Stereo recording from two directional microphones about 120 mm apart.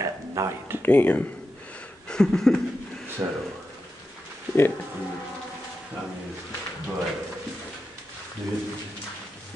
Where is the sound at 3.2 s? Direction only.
25° right (ahead or behind).